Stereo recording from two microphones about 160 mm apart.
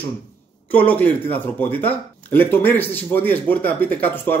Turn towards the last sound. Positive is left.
turn(degrees=10)  # may be behind; listen again after turning